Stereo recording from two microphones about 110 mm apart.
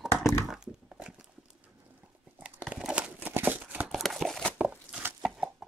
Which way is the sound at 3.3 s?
15° right (ahead or behind).